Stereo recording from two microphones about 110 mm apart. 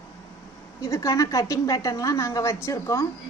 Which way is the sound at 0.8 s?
30° left (ahead or behind).